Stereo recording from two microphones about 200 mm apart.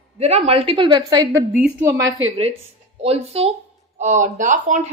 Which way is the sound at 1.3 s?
10° right (ahead or behind).